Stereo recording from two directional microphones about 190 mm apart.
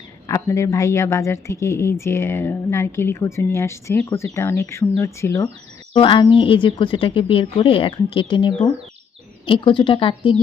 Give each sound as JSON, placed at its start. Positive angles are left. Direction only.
{"t": 0.3, "sound": "a woman's voice", "side_deg": 15}
{"t": 5.9, "sound": "speech", "side_deg": 25}